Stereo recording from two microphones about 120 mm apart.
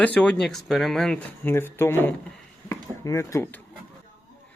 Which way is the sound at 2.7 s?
25° left (ahead or behind).